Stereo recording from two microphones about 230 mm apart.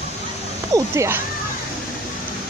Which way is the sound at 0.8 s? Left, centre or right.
Centre.